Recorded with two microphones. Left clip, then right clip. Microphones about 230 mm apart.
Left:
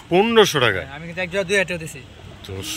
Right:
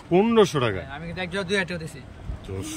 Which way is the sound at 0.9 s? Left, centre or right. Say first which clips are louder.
Left 5 dB; left.